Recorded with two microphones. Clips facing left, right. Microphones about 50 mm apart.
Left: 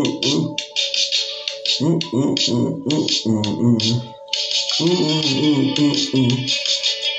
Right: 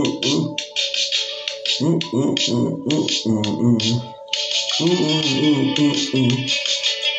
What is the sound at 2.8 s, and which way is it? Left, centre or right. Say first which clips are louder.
Music: even; right.